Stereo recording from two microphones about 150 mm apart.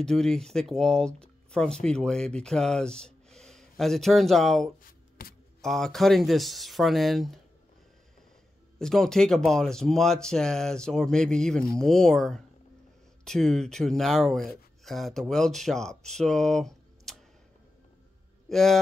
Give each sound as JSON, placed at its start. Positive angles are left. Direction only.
{"t": 0.0, "sound": "speech", "side_deg": 5}
{"t": 4.8, "sound": "shuffling cards", "side_deg": 75}
{"t": 5.6, "sound": "speech", "side_deg": 5}
{"t": 8.7, "sound": "speech", "side_deg": 5}
{"t": 18.5, "sound": "speech", "side_deg": 0}